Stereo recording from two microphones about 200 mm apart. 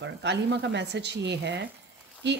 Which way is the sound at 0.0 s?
60° right (ahead or behind).